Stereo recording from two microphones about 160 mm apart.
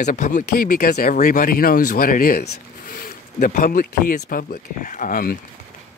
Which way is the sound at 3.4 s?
55° left (ahead or behind).